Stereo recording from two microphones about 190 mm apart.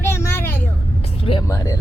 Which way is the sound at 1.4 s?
15° left (ahead or behind).